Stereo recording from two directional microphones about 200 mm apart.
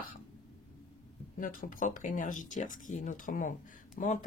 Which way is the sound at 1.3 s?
45° left (ahead or behind).